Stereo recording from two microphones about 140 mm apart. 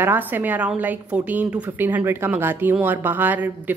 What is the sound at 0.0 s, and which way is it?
A woman's voice, 15° right (ahead or behind).